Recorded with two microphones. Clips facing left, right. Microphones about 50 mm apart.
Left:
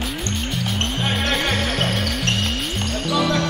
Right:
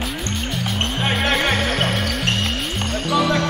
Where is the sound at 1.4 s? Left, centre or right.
Centre.